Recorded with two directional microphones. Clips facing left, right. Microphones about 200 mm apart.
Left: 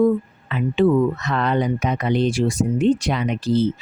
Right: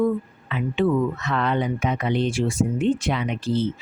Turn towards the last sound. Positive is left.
turn(degrees=40)  # may be behind; listen again after turning